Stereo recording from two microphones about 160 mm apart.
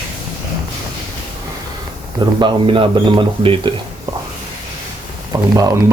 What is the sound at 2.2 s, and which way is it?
Speech, 30° right (ahead or behind).